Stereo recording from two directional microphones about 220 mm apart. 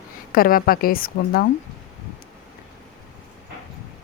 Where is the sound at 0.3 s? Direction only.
40° left (ahead or behind).